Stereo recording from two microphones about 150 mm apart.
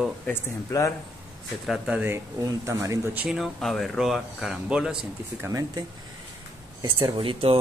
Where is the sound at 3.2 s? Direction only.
Centre (ahead or behind).